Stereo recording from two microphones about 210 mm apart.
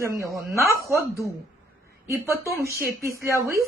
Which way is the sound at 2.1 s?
15° right (ahead or behind).